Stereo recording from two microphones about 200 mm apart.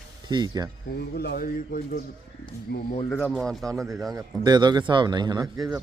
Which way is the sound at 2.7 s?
55° left (ahead or behind).